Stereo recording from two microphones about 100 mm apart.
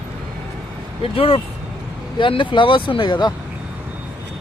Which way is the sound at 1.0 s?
70° left (ahead or behind).